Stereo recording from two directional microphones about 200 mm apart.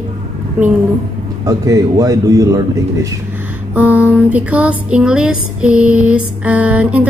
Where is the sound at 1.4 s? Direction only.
15° right (ahead or behind).